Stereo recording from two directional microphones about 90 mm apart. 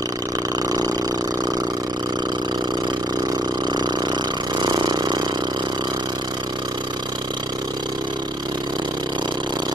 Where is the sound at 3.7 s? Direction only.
55° right (ahead or behind).